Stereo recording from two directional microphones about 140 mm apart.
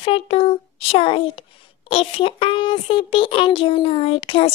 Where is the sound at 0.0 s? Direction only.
40° left (ahead or behind).